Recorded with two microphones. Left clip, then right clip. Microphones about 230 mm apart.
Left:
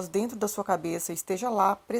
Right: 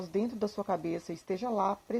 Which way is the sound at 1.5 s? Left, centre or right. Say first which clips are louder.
Left 7 dB; left.